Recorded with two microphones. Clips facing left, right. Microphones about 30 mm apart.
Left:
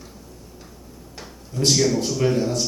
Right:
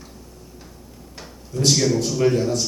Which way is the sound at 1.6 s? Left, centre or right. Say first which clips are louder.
Even; centre.